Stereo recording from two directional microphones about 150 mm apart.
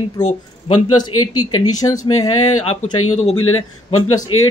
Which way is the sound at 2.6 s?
40° left (ahead or behind).